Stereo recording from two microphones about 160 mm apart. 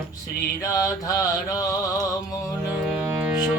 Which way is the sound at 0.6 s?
20° left (ahead or behind).